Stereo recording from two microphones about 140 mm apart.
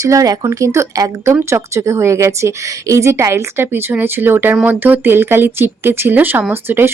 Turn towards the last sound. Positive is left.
turn(degrees=-15)  # may be behind; listen again after turning